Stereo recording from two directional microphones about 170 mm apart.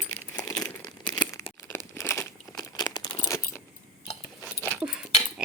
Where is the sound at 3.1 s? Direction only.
15° left (ahead or behind).